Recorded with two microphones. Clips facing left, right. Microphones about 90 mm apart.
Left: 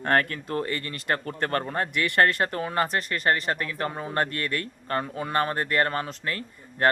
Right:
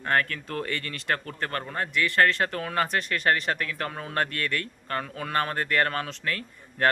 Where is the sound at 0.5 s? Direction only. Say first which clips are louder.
Left 3 dB; 30° left (ahead or behind).